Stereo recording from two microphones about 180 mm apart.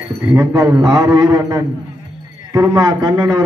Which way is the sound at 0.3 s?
15° right (ahead or behind).